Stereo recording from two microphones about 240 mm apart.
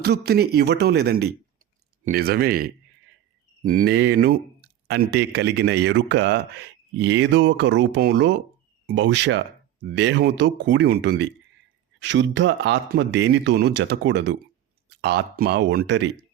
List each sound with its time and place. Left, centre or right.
0.0 s speech: right